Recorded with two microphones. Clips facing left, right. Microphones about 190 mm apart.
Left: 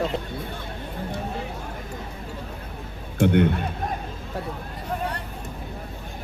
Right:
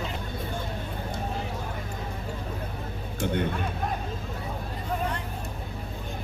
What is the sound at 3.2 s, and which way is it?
Speech, 65° left (ahead or behind).